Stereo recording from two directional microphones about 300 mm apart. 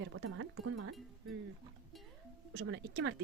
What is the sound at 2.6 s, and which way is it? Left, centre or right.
Speech, right.